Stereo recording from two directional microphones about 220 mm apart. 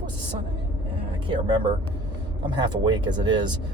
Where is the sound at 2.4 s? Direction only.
20° right (ahead or behind).